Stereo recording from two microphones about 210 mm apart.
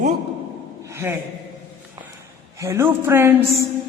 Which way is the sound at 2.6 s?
10° right (ahead or behind).